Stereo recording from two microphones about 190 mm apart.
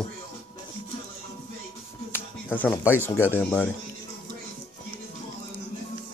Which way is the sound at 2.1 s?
10° left (ahead or behind).